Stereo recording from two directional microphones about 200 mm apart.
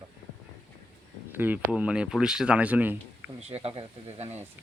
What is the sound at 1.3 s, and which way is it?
Speech, 10° right (ahead or behind).